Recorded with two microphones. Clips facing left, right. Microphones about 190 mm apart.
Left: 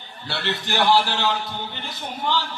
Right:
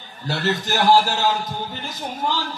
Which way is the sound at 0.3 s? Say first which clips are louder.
Right 4 dB; 45° right (ahead or behind).